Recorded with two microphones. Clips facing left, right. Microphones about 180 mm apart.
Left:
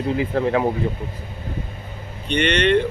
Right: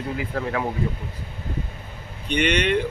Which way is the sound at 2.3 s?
10° right (ahead or behind).